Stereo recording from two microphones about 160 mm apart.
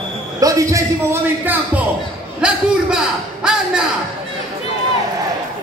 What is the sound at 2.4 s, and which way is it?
A man's voice, 5° right (ahead or behind).